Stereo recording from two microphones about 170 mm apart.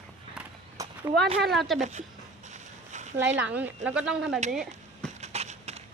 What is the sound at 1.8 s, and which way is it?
Speech, 40° right (ahead or behind).